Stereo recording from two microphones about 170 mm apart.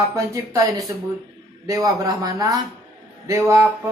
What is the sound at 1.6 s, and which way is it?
Speech, 20° right (ahead or behind).